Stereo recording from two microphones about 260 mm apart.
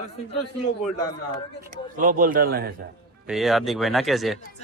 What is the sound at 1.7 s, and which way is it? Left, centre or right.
Speech, right.